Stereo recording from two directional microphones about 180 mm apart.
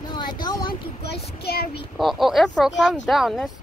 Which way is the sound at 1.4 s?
60° left (ahead or behind).